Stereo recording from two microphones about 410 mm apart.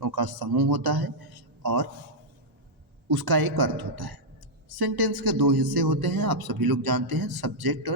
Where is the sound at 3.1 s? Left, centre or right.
Right.